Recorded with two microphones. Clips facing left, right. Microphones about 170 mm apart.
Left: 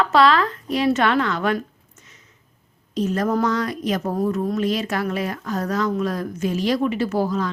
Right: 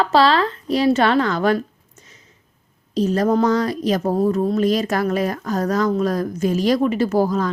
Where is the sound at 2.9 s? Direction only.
35° right (ahead or behind).